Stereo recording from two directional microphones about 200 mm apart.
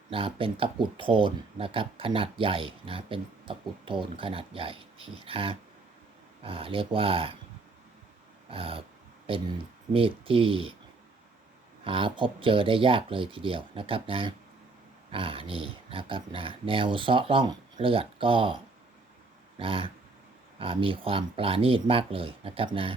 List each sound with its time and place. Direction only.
0.1 s speech: 25° right (ahead or behind)
8.4 s speech: 25° right (ahead or behind)
11.9 s speech: 25° right (ahead or behind)
19.5 s speech: 25° right (ahead or behind)